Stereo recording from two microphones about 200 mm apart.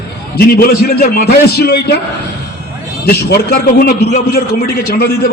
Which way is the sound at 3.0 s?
50° left (ahead or behind).